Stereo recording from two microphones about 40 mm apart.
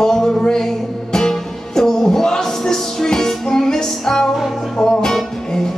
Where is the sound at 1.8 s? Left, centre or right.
Centre.